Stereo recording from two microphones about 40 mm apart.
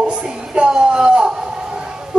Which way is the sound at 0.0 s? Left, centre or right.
Right.